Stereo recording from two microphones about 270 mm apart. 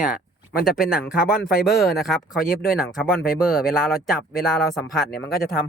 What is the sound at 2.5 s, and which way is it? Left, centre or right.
Speech, left.